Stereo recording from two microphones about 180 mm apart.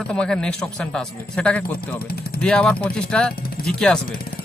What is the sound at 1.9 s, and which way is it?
Speech, 55° left (ahead or behind).